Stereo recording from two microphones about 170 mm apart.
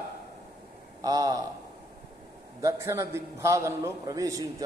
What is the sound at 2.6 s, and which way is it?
Speech, 15° right (ahead or behind).